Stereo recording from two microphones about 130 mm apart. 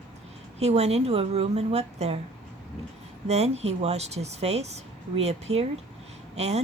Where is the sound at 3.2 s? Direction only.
55° right (ahead or behind).